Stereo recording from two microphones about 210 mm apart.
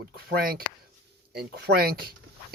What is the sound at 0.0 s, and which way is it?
Speech, 45° right (ahead or behind).